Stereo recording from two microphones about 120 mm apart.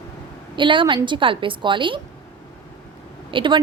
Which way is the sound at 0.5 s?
45° right (ahead or behind).